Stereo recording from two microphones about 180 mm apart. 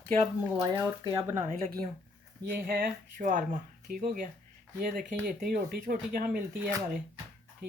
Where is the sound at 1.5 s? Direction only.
55° right (ahead or behind).